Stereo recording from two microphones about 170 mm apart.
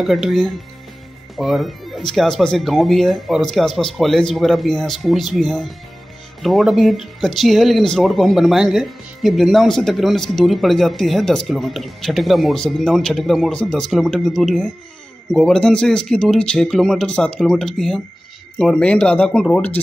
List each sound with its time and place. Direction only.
0.0 s speech: centre (ahead or behind)